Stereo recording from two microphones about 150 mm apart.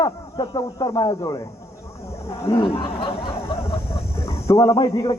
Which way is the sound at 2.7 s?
40° left (ahead or behind).